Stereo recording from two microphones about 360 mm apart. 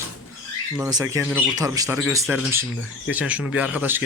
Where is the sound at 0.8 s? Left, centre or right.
Centre.